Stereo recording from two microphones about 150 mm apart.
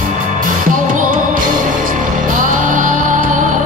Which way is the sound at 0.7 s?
65° right (ahead or behind).